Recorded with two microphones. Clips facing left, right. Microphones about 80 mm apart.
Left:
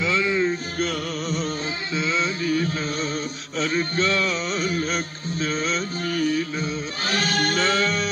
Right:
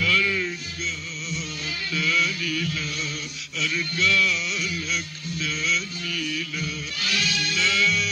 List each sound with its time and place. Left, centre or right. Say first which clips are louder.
0.0 s music: left 3 dB; left
0.7 s music: left 8 dB; left
2.0 s music: left 1 dB; left